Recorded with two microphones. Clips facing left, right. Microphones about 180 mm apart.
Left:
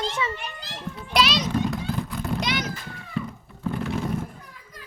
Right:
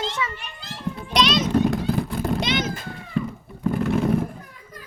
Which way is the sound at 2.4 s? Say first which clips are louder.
Right 3 dB; 25° right (ahead or behind).